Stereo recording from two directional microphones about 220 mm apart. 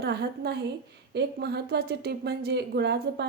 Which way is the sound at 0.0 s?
50° right (ahead or behind).